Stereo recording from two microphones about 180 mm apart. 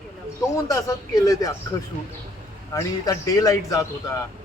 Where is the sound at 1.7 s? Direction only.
20° left (ahead or behind).